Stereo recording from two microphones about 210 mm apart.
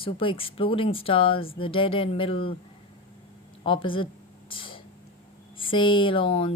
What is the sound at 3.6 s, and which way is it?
Speech, 25° left (ahead or behind).